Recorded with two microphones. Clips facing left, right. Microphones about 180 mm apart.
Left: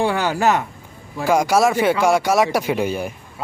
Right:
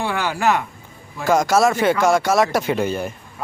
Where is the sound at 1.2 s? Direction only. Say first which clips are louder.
Even; 10° left (ahead or behind).